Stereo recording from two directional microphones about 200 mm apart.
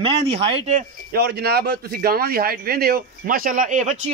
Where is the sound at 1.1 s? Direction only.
55° right (ahead or behind).